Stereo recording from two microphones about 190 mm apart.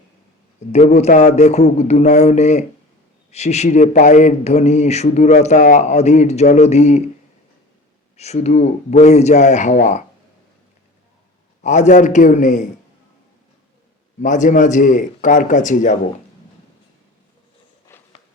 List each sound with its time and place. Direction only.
0.7 s speech: 35° left (ahead or behind)
8.1 s speech: 35° left (ahead or behind)
11.6 s speech: 40° left (ahead or behind)
14.2 s speech: 40° left (ahead or behind)
17.9 s a sound: 15° left (ahead or behind)